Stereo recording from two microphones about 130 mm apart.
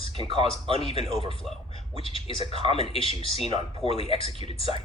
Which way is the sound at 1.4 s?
Centre (ahead or behind).